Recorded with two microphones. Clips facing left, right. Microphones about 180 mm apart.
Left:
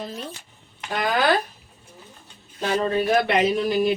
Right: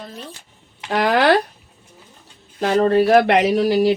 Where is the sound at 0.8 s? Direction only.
75° right (ahead or behind).